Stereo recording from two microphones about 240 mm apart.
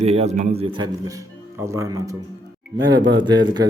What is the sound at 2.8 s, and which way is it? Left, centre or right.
Speech, centre.